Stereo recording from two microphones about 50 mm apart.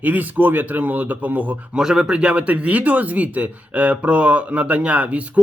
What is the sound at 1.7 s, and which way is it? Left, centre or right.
A man's voice, centre.